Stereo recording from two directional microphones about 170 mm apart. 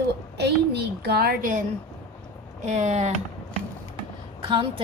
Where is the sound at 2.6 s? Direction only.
40° right (ahead or behind).